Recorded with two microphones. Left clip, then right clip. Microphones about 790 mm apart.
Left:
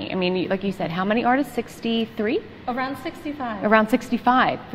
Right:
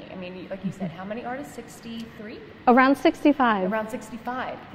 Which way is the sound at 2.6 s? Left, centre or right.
Right.